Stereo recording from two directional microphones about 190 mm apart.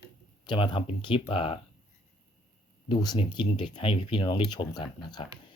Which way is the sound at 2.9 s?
25° left (ahead or behind).